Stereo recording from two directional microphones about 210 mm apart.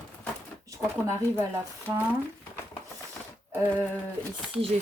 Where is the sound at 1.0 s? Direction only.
15° right (ahead or behind).